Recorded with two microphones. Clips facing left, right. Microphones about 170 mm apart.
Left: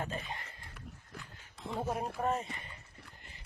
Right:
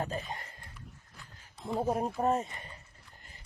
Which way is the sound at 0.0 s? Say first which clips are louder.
Right 3 dB; 40° right (ahead or behind).